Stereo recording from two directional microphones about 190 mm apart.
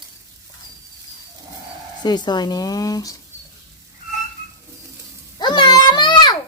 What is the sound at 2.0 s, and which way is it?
Speech, 20° left (ahead or behind).